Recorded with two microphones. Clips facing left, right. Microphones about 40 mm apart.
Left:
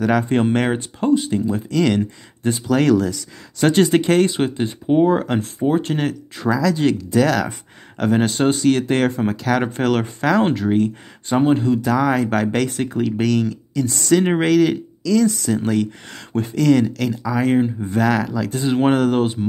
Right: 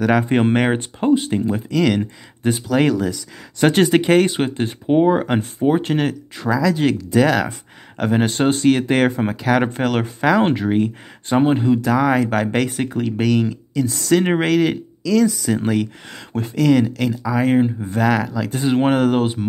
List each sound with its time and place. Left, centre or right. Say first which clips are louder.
0.0 s speech: right 1 dB; centre
1.7 s speech: even; centre
8.3 s speech: right 1 dB; right
8.7 s speech: right 1 dB; centre